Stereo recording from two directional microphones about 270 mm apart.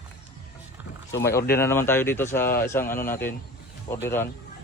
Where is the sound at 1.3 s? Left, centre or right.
Left.